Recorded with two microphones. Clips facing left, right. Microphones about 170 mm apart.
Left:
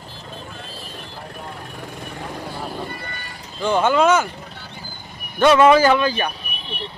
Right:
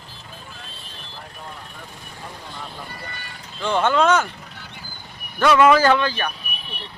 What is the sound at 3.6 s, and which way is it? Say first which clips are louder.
Speech: left 2 dB; 10° left (ahead or behind).